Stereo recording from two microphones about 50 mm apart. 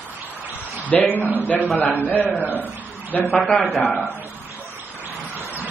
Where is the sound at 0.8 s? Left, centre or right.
Left.